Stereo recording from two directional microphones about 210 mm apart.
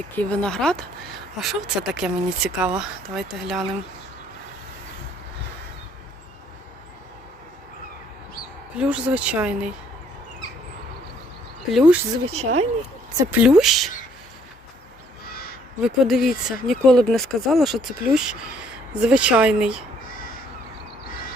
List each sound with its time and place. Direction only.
0.2 s speech: 5° left (ahead or behind)
8.7 s speech: 5° right (ahead or behind)
11.7 s speech: 5° right (ahead or behind)
12.3 s speech: 30° right (ahead or behind)
13.3 s speech: 5° right (ahead or behind)
15.8 s speech: centre (ahead or behind)